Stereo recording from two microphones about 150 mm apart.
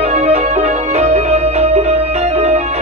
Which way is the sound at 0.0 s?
45° right (ahead or behind).